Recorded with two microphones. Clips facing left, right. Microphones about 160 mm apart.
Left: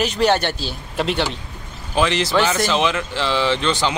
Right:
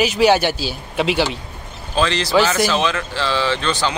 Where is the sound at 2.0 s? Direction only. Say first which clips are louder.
Right 1 dB; 20° left (ahead or behind).